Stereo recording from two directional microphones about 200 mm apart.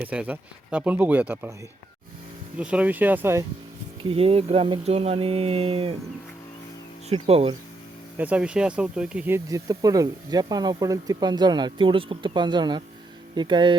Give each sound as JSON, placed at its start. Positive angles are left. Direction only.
{"t": 0.0, "sound": "speech", "side_deg": -5}
{"t": 2.6, "sound": "speech", "side_deg": -5}
{"t": 4.1, "sound": "speech", "side_deg": -30}
{"t": 7.1, "sound": "speech", "side_deg": -30}
{"t": 8.2, "sound": "speech", "side_deg": -5}